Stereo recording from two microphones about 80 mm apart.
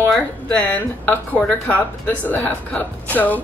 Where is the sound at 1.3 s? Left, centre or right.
Centre.